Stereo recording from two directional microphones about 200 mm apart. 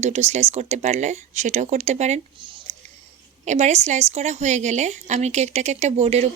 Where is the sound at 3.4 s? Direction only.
35° right (ahead or behind).